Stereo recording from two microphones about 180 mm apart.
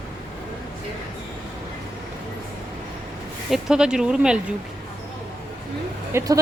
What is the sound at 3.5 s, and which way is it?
Speech, 5° right (ahead or behind).